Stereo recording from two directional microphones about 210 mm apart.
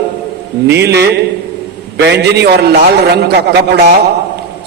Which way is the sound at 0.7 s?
50° right (ahead or behind).